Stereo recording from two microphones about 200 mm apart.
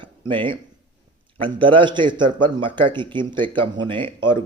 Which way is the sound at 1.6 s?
25° right (ahead or behind).